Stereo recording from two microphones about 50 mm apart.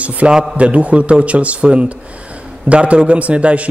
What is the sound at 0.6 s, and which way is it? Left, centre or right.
A man's voice, right.